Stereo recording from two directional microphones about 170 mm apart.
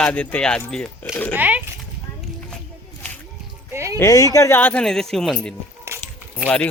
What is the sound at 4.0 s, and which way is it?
Speech, 20° left (ahead or behind).